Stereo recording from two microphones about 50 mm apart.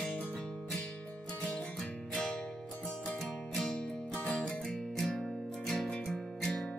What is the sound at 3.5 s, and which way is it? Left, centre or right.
Music, centre.